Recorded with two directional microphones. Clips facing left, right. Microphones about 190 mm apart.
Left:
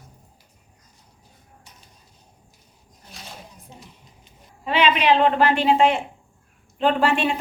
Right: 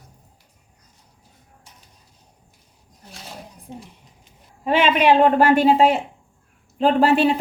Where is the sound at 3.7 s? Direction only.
55° right (ahead or behind).